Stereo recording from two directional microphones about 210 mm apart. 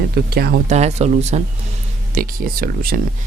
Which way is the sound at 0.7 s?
30° right (ahead or behind).